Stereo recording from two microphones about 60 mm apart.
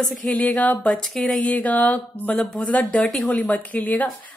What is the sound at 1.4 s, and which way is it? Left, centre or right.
A woman's voice, left.